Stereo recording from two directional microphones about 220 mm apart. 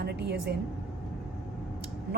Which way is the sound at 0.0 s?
50° right (ahead or behind).